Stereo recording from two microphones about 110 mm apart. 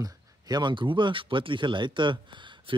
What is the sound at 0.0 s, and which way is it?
Speech, 40° right (ahead or behind).